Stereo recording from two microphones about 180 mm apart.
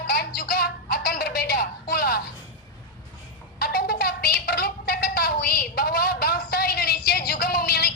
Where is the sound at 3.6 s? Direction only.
60° left (ahead or behind).